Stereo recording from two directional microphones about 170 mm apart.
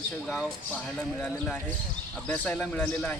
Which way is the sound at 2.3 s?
5° left (ahead or behind).